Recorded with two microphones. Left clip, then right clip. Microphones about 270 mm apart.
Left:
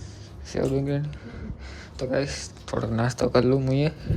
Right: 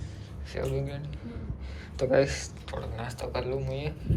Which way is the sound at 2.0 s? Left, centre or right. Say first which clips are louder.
Right 2 dB; centre.